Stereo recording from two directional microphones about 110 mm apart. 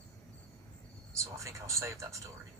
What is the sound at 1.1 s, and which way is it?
Speech, 25° right (ahead or behind).